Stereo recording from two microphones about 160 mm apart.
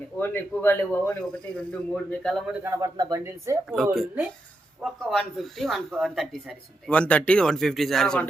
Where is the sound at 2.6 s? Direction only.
20° right (ahead or behind).